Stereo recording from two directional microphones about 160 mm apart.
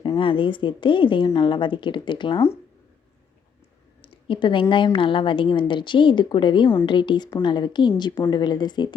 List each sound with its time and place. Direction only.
0.2 s a woman's voice: 30° left (ahead or behind)
4.0 s a sound: 35° left (ahead or behind)
4.7 s a woman's voice: 30° left (ahead or behind)